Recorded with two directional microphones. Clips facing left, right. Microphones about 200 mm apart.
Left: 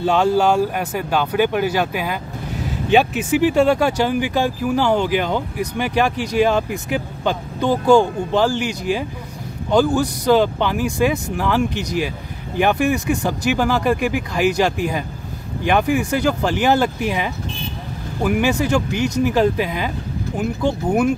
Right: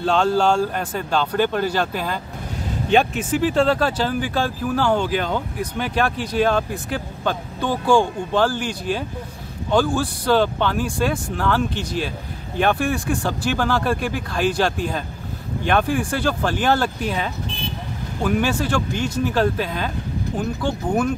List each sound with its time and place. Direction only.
0.0 s speech: 10° left (ahead or behind)